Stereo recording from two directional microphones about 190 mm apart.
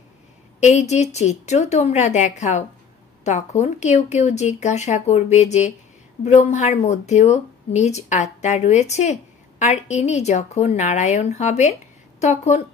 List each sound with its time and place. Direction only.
0.6 s speech: 35° left (ahead or behind)